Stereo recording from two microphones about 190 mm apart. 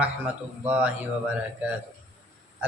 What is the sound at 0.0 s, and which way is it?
Speech, 10° right (ahead or behind).